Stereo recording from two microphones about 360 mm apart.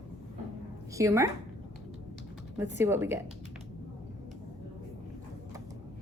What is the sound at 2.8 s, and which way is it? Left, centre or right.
Speech, centre.